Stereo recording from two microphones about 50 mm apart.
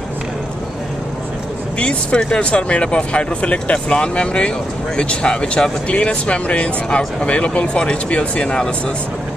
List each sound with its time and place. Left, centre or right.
1.8 s speech: left